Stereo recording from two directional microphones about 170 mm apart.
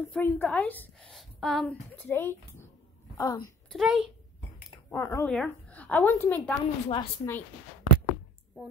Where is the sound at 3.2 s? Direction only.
20° left (ahead or behind).